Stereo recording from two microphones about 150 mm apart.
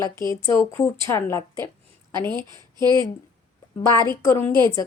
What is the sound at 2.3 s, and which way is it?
Speech, 30° right (ahead or behind).